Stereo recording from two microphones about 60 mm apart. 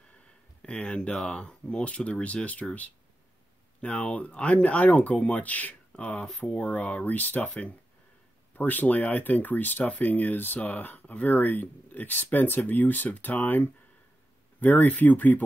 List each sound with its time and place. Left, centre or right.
0.6 s speech: centre
3.8 s speech: left